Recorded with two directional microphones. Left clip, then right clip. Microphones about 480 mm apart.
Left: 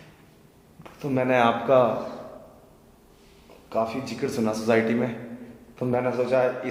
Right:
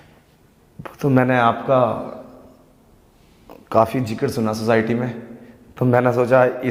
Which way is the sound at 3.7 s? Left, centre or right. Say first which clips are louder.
Right 10 dB; right.